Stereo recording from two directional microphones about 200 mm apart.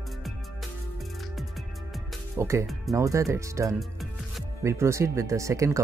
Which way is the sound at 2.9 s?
15° right (ahead or behind).